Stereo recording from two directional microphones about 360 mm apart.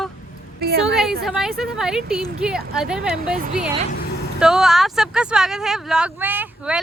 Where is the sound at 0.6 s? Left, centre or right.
Right.